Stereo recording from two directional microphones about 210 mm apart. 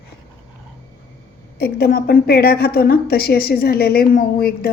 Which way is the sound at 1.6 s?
45° left (ahead or behind).